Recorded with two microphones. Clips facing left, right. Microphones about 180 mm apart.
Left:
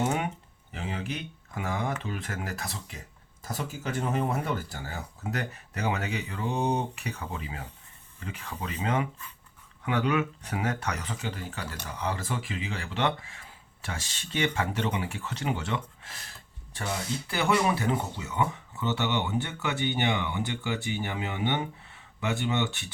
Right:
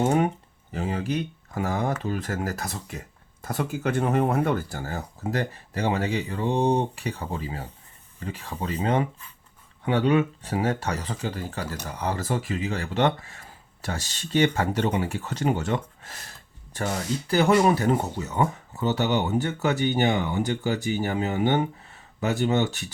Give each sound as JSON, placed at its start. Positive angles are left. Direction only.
{"t": 0.0, "sound": "a sound", "side_deg": -35}
{"t": 0.7, "sound": "speech", "side_deg": -40}
{"t": 4.8, "sound": "speech", "side_deg": -45}